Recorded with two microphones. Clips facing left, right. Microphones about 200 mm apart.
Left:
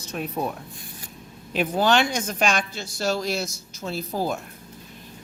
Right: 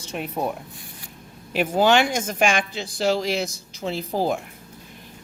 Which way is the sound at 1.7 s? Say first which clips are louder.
Right 3 dB; 15° right (ahead or behind).